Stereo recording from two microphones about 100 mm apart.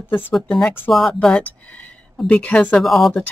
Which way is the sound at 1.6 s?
15° left (ahead or behind).